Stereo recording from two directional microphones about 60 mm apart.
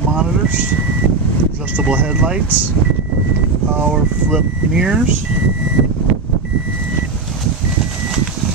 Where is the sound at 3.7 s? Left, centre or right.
Right.